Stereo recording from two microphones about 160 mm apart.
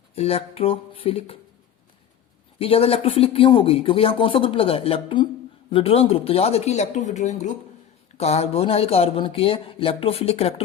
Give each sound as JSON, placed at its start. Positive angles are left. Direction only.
{"t": 0.2, "sound": "speech", "side_deg": 40}
{"t": 2.6, "sound": "speech", "side_deg": 35}